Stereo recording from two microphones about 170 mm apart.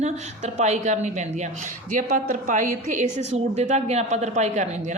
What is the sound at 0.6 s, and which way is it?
A woman's voice, 45° right (ahead or behind).